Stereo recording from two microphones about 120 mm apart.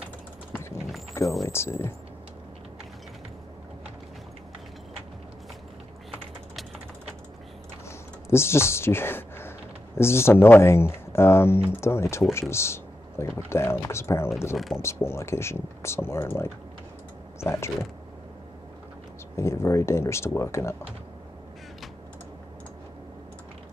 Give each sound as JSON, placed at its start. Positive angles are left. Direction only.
{"t": 1.4, "sound": "speech", "side_deg": 20}
{"t": 8.3, "sound": "speech", "side_deg": 20}
{"t": 19.3, "sound": "speech", "side_deg": 25}